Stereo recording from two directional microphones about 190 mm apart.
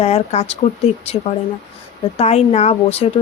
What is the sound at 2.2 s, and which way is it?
Speech, 35° left (ahead or behind).